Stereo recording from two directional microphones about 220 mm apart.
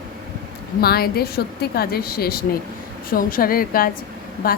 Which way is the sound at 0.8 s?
45° left (ahead or behind).